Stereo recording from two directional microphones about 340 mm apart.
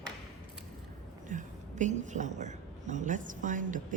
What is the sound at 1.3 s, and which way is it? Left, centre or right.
A woman's voice, right.